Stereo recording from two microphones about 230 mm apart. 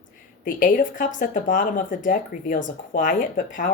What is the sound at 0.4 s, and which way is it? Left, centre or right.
Speech, left.